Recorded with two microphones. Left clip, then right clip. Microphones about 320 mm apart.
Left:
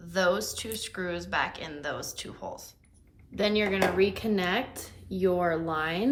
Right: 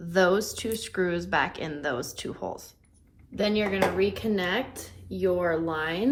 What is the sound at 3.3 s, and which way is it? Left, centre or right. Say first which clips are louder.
Speech: right 1 dB; centre.